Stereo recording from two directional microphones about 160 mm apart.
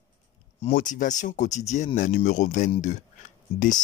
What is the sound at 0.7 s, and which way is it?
Speech, 55° left (ahead or behind).